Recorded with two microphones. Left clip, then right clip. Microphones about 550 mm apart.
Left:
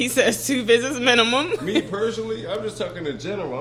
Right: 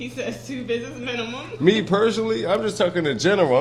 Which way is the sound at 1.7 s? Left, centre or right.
Right.